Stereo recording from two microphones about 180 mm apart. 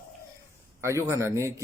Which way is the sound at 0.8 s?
15° right (ahead or behind).